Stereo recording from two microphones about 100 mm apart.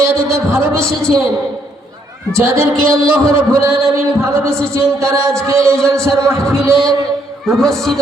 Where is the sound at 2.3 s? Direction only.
25° right (ahead or behind).